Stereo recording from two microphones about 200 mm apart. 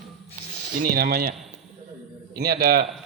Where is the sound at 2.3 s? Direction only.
50° right (ahead or behind).